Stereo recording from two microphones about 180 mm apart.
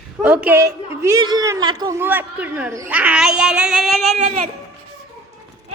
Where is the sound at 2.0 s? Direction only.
10° right (ahead or behind).